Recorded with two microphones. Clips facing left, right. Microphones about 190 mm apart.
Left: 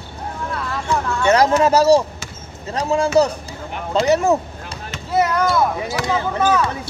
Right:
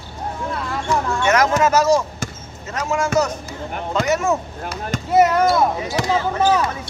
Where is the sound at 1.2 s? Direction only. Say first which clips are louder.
Left 3 dB; 30° left (ahead or behind).